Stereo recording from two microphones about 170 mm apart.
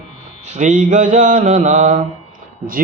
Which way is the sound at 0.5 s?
45° right (ahead or behind).